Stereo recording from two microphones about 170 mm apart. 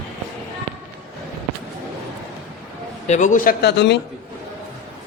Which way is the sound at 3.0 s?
45° left (ahead or behind).